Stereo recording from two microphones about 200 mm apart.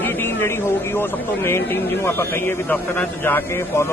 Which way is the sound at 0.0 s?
10° left (ahead or behind).